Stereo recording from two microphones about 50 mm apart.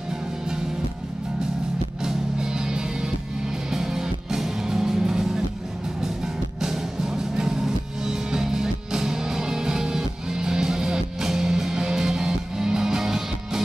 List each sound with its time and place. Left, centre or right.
2.0 s music: centre